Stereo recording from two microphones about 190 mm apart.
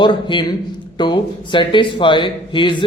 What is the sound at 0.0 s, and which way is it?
A man's voice, 25° left (ahead or behind).